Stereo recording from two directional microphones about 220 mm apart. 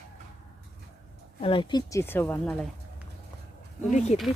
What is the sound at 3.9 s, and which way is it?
Speech, 30° left (ahead or behind).